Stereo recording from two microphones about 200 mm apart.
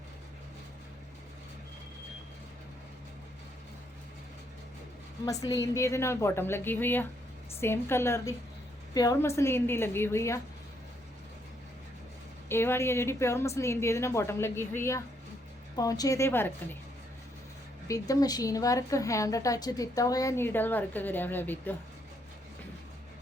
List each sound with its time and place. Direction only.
5.2 s a woman's voice: 15° left (ahead or behind)
12.5 s a woman's voice: 10° left (ahead or behind)
17.8 s a woman's voice: 15° left (ahead or behind)